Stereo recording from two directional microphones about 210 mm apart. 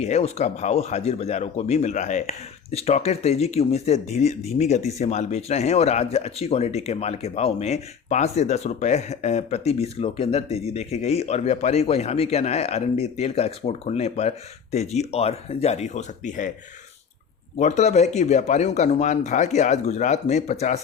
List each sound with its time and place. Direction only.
0.0 s speech: 30° left (ahead or behind)
17.6 s speech: 35° left (ahead or behind)